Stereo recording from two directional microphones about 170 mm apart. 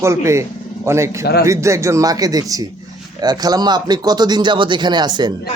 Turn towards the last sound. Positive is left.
turn(degrees=-25)  # may be behind; listen again after turning